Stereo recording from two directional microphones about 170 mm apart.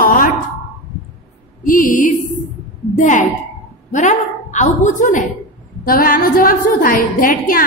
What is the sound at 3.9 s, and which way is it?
A woman's voice, 45° left (ahead or behind).